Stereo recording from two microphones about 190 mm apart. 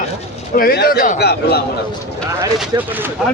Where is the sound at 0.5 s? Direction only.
55° left (ahead or behind).